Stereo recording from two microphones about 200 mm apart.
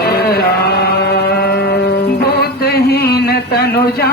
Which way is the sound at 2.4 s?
50° left (ahead or behind).